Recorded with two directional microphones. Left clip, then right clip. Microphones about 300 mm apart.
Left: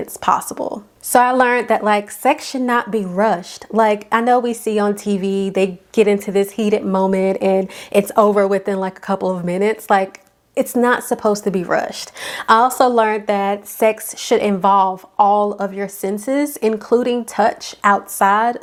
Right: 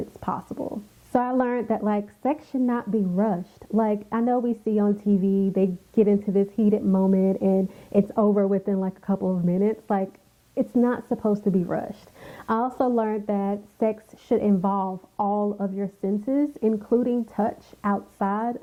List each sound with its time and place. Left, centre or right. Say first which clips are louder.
0.2 s a woman's voice: left 14 dB; centre
1.1 s a woman's voice: left 11 dB; centre
15.3 s a woman's voice: left 10 dB; left